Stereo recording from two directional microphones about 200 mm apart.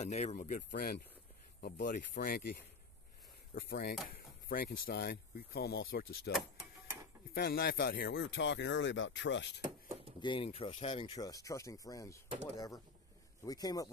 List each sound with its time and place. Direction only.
0.0 s speech: 35° left (ahead or behind); by 2.5 s 50° left (ahead or behind)
3.5 s speech: 50° left (ahead or behind)
4.1 s a sound: 45° left (ahead or behind)
4.8 s speech: 50° left (ahead or behind)
7.3 s speech: 50° left (ahead or behind)
10.2 s a man's voice: 25° left (ahead or behind)